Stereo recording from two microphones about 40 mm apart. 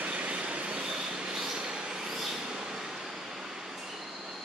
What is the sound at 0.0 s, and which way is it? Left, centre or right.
Train, right.